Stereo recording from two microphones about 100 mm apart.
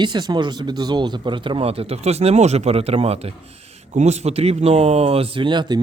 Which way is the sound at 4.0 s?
90° right.